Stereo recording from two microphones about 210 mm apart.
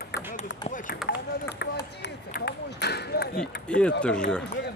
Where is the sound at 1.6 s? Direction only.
55° left (ahead or behind).